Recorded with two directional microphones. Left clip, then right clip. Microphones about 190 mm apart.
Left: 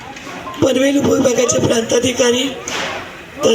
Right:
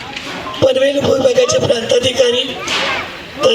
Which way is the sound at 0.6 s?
90° left.